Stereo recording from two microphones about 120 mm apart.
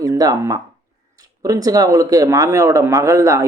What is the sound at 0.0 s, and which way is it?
Speech, 30° right (ahead or behind).